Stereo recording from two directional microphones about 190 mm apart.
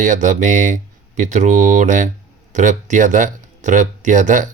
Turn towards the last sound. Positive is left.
turn(degrees=-40)  # may be behind; listen again after turning